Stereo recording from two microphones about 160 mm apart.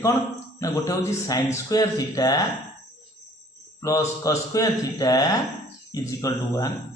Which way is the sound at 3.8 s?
20° left (ahead or behind).